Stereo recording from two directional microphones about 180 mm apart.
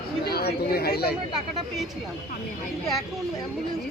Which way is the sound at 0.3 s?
60° left (ahead or behind).